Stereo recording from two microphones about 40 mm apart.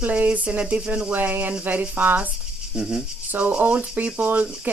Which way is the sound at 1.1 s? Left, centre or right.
Right.